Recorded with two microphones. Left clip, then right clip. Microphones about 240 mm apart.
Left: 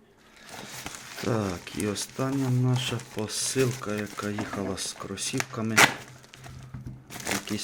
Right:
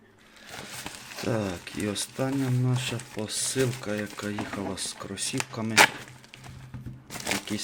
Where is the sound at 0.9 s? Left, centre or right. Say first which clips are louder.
Left 1 dB; centre.